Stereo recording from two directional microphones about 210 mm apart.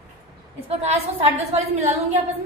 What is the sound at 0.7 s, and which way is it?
A woman's voice, 30° right (ahead or behind).